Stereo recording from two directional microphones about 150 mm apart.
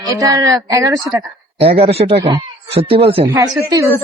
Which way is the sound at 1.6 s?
40° right (ahead or behind).